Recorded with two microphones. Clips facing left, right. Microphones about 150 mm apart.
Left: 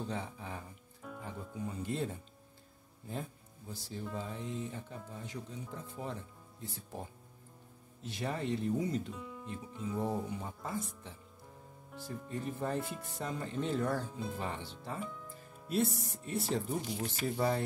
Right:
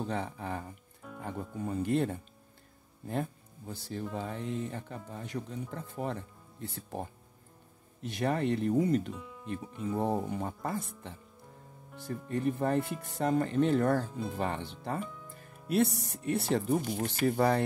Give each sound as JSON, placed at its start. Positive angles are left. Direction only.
{"t": 0.1, "sound": "speech", "side_deg": -60}
{"t": 3.1, "sound": "speech", "side_deg": -65}
{"t": 9.1, "sound": "speech", "side_deg": 0}
{"t": 9.5, "sound": "speech", "side_deg": -65}
{"t": 12.3, "sound": "speech", "side_deg": -65}